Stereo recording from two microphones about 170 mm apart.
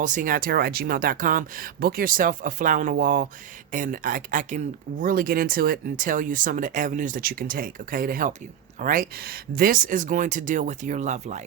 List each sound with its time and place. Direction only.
0.0 s speech: 50° right (ahead or behind)